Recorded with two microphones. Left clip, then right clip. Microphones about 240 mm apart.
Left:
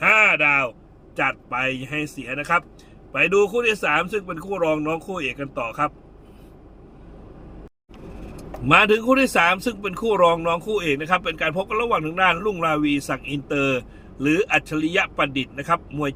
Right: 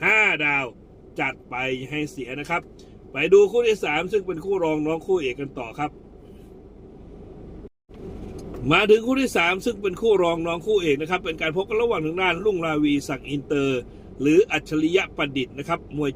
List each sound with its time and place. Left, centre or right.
0.0 s a sound: centre
1.1 s a man's voice: centre
8.6 s a man's voice: centre